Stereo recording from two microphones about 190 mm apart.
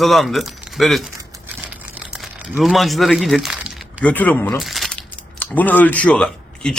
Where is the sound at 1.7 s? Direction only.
5° right (ahead or behind).